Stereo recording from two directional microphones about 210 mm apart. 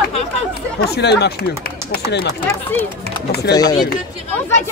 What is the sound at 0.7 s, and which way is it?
Speech, 50° left (ahead or behind).